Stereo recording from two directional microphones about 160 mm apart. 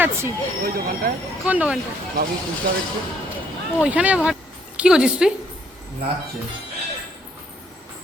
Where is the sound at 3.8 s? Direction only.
10° right (ahead or behind).